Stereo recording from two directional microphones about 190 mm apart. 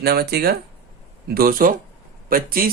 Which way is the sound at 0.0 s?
55° right (ahead or behind).